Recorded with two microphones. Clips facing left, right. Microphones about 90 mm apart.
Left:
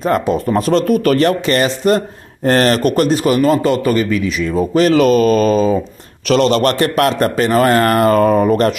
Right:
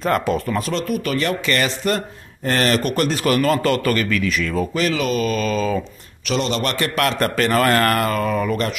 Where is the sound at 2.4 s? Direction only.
45° left (ahead or behind).